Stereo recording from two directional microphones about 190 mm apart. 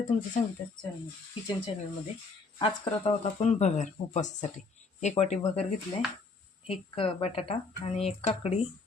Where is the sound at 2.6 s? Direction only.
30° left (ahead or behind).